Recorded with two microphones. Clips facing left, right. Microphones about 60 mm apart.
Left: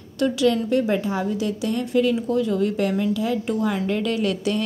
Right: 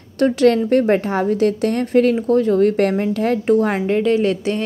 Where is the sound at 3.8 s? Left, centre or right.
Right.